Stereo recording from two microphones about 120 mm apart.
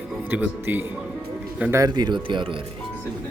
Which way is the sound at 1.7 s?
30° right (ahead or behind).